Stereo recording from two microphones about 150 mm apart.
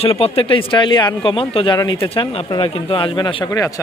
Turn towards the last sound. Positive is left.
turn(degrees=25)  # may be behind; listen again after turning